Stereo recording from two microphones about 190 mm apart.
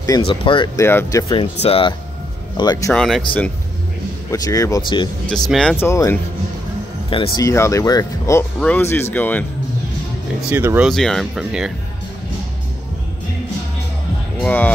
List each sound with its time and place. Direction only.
0.0 s speech: 25° left (ahead or behind)
0.7 s speech: 15° left (ahead or behind)
1.3 s speech: 30° left (ahead or behind)
2.9 s speech: 5° left (ahead or behind)
4.3 s speech: 15° left (ahead or behind)
5.5 s speech: 5° left (ahead or behind)
7.1 s speech: 30° left (ahead or behind)
7.4 s speech: 15° left (ahead or behind)
10.5 s speech: 10° right (ahead or behind)
10.9 s speech: centre (ahead or behind)
14.4 s speech: 10° left (ahead or behind)